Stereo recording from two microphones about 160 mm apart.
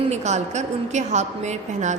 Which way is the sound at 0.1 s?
45° right (ahead or behind).